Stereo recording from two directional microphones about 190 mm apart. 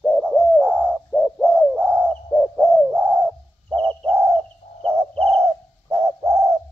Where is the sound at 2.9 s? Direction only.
10° right (ahead or behind).